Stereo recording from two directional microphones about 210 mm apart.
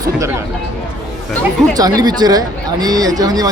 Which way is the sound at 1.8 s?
20° right (ahead or behind).